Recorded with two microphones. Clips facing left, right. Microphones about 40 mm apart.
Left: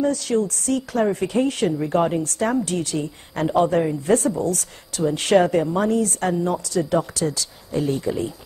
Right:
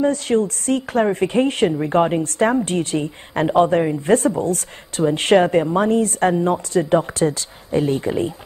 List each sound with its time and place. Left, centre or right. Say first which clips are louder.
0.0 s speech: right 3 dB; right